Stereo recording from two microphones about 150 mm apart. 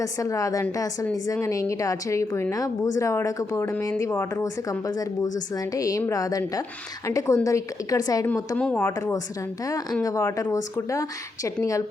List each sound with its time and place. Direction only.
0.0 s speech: 20° left (ahead or behind)
8.5 s speech: 10° left (ahead or behind)